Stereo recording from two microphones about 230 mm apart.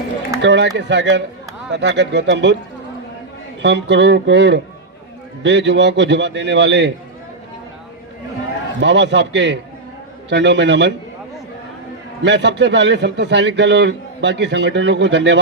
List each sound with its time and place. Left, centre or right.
0.4 s a man's voice: right
3.6 s a man's voice: right
8.8 s a man's voice: right
12.2 s a man's voice: right